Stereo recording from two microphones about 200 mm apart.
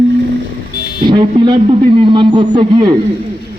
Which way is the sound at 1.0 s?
25° right (ahead or behind).